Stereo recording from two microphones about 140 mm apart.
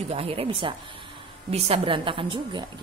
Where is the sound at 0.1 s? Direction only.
45° right (ahead or behind).